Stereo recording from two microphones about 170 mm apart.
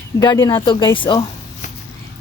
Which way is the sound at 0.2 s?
20° left (ahead or behind).